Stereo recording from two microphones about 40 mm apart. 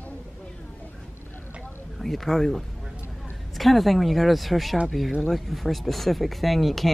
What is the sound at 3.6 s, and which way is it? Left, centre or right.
Speech, centre.